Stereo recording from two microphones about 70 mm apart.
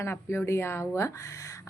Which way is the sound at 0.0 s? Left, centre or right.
Left.